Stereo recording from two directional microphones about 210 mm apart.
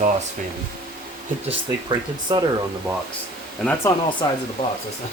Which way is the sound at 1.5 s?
20° right (ahead or behind).